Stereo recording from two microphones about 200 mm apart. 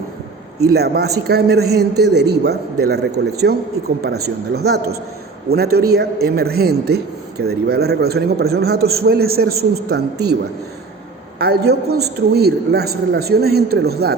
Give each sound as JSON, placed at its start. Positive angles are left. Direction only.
{"t": 0.6, "sound": "speech", "side_deg": -55}
{"t": 11.3, "sound": "speech", "side_deg": -50}